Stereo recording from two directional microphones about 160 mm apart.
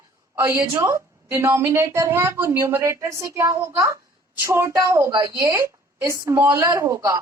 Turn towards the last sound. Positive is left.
turn(degrees=-20)  # may be behind; listen again after turning